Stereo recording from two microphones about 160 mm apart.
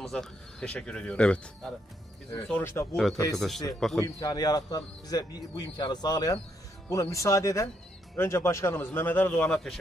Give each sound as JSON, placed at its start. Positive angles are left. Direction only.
{"t": 0.0, "sound": "a man's voice", "side_deg": 5}
{"t": 3.3, "sound": "speech", "side_deg": 0}
{"t": 4.0, "sound": "a man's voice", "side_deg": 25}